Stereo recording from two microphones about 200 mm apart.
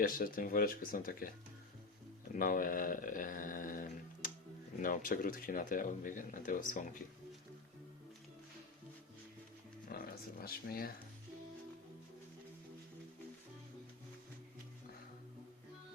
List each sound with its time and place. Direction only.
0.0 s speech: 45° left (ahead or behind)
2.3 s speech: 45° left (ahead or behind)
9.9 s a sound: 50° left (ahead or behind)